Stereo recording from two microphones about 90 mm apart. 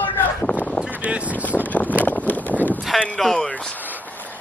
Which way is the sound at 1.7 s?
20° left (ahead or behind).